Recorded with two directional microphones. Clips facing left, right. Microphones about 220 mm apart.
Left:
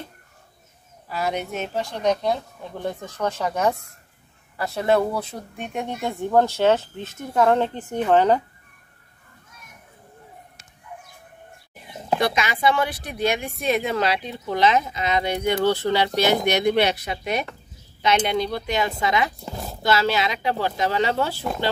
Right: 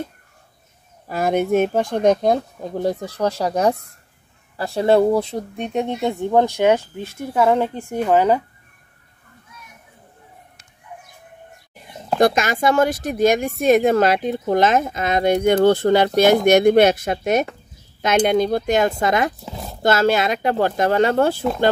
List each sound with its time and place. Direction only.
1.0 s speech: 50° right (ahead or behind); by 8.4 s 10° right (ahead or behind)
12.2 s speech: 45° right (ahead or behind)
19.4 s a sound: centre (ahead or behind)
19.8 s speech: 50° right (ahead or behind)